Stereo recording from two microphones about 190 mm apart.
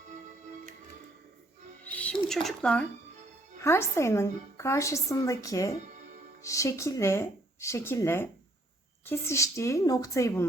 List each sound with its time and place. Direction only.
1.8 s music: 5° left (ahead or behind)
2.3 s speech: centre (ahead or behind)
3.6 s a woman's voice: 15° left (ahead or behind)